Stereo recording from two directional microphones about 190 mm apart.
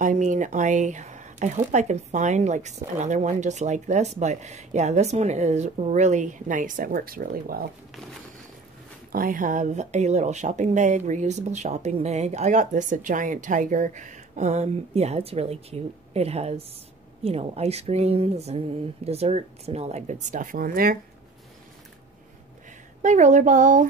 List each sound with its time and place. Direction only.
0.0 s speech: 40° right (ahead or behind)
9.1 s speech: 45° right (ahead or behind)
23.0 s speech: 40° right (ahead or behind)